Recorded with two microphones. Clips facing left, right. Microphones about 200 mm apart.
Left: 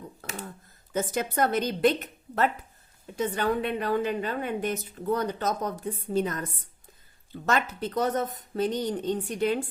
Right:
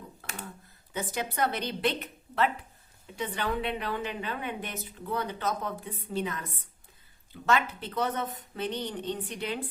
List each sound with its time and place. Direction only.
0.9 s a woman's voice: 45° left (ahead or behind)